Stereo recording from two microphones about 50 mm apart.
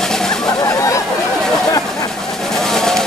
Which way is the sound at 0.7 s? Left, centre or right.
Left.